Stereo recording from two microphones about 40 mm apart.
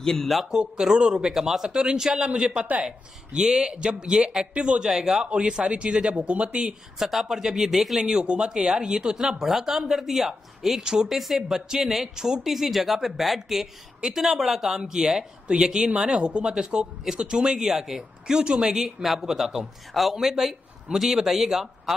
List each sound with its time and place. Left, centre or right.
0.0 s a man's voice: centre
0.6 s speech: centre
1.3 s speech: centre; by 4.8 s right
4.8 s speech: centre; by 6.6 s right
7.0 s speech: centre
8.0 s speech: right
16.5 s speech: centre